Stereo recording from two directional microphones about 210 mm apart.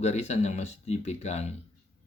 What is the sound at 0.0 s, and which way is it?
A man's voice, 30° left (ahead or behind).